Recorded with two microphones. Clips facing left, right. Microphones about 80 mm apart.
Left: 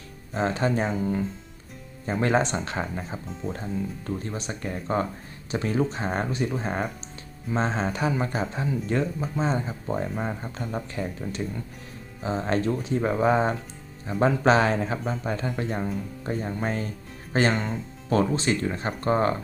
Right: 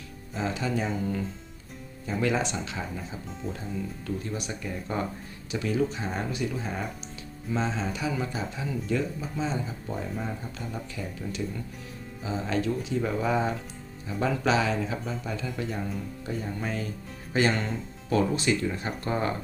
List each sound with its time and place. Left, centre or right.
0.3 s speech: left
2.0 s speech: left
3.4 s speech: centre
4.0 s speech: left